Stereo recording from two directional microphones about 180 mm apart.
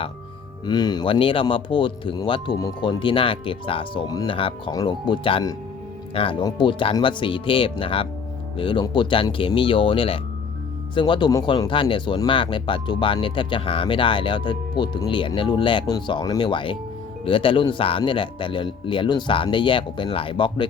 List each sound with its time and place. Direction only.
0.6 s speech: 25° left (ahead or behind)